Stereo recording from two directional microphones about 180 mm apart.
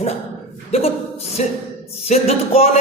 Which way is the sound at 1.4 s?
40° left (ahead or behind).